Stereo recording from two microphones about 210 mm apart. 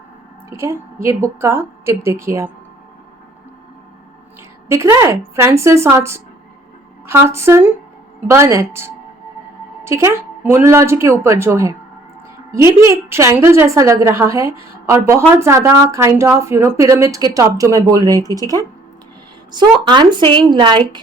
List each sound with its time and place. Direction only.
0.5 s a woman's voice: 10° right (ahead or behind)
4.7 s a woman's voice: 15° right (ahead or behind)